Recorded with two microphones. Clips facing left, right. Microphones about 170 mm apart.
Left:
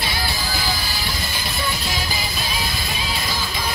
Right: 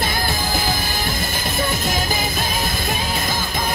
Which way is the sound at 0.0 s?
50° right (ahead or behind).